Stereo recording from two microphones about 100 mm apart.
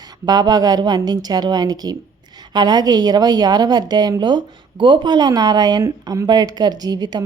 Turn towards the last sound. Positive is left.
turn(degrees=-45)  # may be behind; listen again after turning